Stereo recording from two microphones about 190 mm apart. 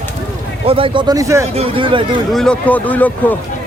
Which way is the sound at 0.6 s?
30° right (ahead or behind).